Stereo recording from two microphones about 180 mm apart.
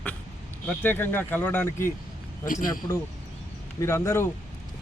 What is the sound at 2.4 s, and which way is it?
Speech, 50° left (ahead or behind).